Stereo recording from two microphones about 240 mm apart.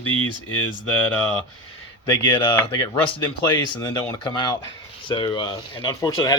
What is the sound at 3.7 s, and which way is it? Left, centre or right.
Speech, centre.